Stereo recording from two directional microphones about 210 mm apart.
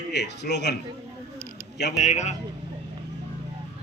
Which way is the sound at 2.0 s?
35° left (ahead or behind).